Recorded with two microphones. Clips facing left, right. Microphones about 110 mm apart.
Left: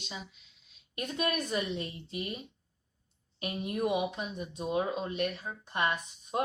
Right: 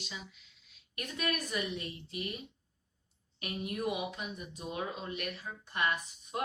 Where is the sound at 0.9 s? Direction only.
25° left (ahead or behind).